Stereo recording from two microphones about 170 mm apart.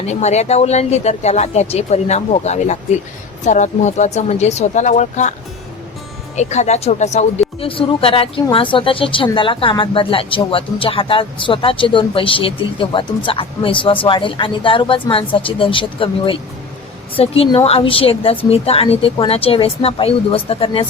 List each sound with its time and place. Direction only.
0.1 s speech: 40° left (ahead or behind)
6.3 s speech: 45° left (ahead or behind)